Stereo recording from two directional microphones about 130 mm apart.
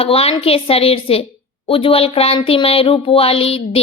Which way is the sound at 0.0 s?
50° left (ahead or behind).